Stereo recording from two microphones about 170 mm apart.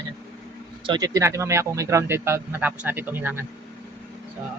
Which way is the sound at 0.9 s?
20° right (ahead or behind).